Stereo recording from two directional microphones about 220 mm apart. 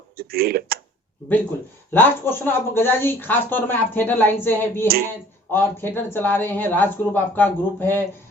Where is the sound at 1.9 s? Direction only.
10° left (ahead or behind).